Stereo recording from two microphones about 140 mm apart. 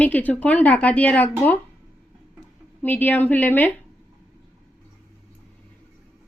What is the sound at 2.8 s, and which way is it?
Speech, 15° left (ahead or behind).